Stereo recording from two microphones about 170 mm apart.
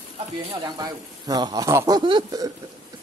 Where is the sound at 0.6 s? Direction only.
25° right (ahead or behind).